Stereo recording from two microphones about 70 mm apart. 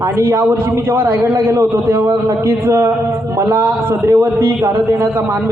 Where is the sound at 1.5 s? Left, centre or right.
Right.